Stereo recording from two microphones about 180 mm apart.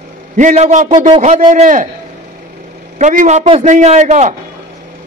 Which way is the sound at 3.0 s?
40° right (ahead or behind).